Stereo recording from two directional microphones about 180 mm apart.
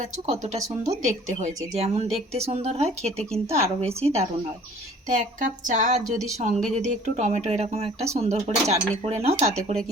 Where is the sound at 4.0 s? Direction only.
35° right (ahead or behind).